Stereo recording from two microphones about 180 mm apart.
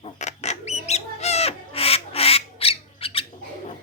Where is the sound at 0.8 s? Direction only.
35° left (ahead or behind).